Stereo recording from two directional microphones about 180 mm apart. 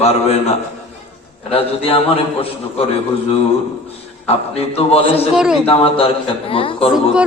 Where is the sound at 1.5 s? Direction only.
35° left (ahead or behind).